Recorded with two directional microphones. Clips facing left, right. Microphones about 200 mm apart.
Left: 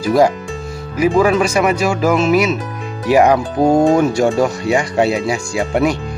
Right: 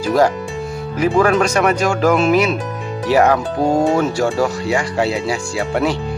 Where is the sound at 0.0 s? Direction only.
10° left (ahead or behind).